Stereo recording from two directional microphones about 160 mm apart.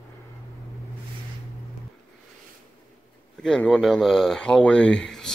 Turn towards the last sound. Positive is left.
turn(degrees=5)  # may be behind; listen again after turning